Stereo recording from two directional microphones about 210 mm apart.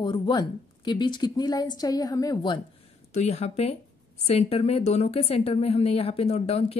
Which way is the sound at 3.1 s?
30° left (ahead or behind).